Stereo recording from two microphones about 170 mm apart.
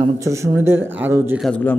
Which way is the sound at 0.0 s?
20° right (ahead or behind).